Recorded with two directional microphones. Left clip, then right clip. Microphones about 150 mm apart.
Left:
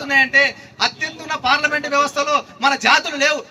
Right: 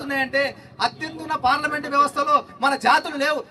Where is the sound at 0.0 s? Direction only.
45° right (ahead or behind).